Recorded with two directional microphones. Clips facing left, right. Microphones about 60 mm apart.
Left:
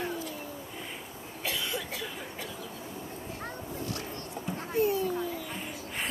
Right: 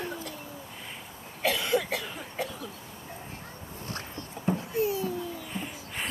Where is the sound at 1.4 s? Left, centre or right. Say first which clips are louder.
Right 8 dB; right.